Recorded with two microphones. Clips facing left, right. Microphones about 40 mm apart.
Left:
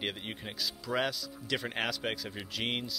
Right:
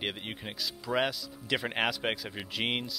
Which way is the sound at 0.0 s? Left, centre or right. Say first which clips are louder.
Right 1 dB; centre.